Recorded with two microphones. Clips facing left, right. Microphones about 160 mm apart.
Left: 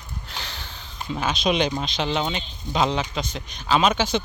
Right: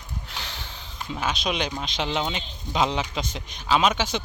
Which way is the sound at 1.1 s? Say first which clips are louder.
Left 4 dB; 5° right (ahead or behind).